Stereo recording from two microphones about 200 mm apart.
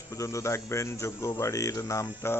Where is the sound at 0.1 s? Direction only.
15° left (ahead or behind).